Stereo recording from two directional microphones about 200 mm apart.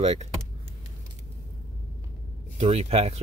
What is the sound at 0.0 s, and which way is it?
Speech, 35° right (ahead or behind).